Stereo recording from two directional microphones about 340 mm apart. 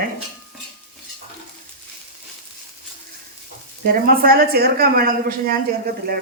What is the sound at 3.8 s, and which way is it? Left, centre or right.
A woman's voice, right.